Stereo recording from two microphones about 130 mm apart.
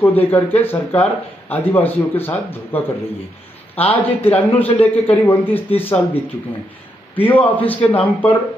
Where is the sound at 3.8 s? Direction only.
50° left (ahead or behind).